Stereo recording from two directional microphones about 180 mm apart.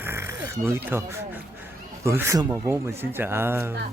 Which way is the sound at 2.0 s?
15° right (ahead or behind).